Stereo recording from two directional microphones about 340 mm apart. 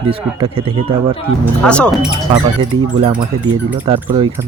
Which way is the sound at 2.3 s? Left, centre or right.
Centre.